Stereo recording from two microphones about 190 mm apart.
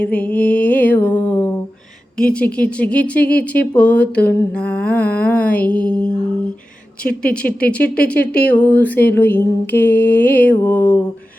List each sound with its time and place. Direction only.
0.0 s music: 5° left (ahead or behind)
2.1 s mantra: 5° left (ahead or behind)
7.0 s speech: 50° left (ahead or behind)
7.4 s mantra: 5° left (ahead or behind)